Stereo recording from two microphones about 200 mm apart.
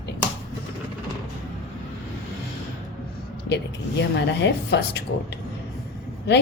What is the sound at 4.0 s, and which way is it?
A woman's voice, 60° left (ahead or behind).